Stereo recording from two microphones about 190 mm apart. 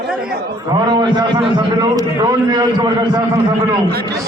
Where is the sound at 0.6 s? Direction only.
25° right (ahead or behind).